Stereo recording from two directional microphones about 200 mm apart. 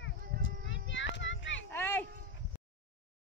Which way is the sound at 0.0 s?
70° left (ahead or behind).